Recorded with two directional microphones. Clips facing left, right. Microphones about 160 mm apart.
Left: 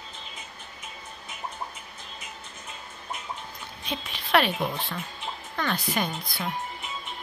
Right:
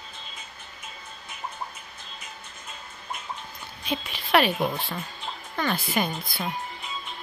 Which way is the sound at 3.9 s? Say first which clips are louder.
Right 2 dB; 5° right (ahead or behind).